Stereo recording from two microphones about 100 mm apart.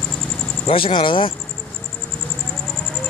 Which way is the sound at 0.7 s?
60° left (ahead or behind).